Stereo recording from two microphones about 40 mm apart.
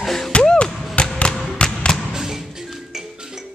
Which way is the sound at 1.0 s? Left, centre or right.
Left.